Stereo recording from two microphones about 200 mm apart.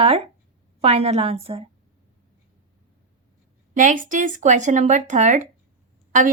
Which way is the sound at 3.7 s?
40° right (ahead or behind).